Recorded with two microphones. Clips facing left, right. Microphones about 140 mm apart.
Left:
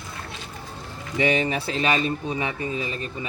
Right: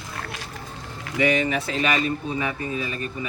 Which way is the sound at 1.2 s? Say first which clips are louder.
Right 1 dB; 30° left (ahead or behind).